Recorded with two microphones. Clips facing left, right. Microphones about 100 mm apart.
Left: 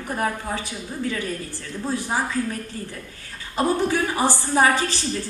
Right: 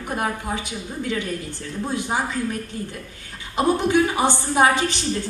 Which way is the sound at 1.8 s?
20° right (ahead or behind).